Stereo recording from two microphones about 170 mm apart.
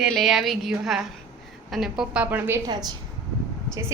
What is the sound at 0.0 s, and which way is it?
A woman's voice, centre (ahead or behind).